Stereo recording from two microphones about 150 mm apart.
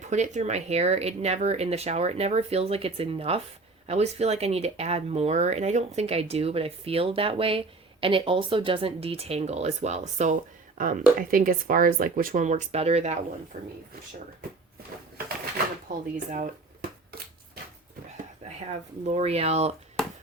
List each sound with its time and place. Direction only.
0.0 s speech: 50° right (ahead or behind)
10.8 s speech: 65° right (ahead or behind)
16.1 s speech: 60° right (ahead or behind)
18.4 s speech: 45° right (ahead or behind)